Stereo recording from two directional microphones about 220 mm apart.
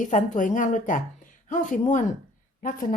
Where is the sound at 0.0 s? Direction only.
35° left (ahead or behind).